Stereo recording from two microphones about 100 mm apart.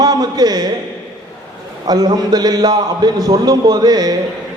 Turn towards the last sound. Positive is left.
turn(degrees=-40)  # may be behind; listen again after turning